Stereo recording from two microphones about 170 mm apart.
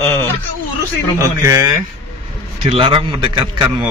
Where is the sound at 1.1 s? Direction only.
20° right (ahead or behind).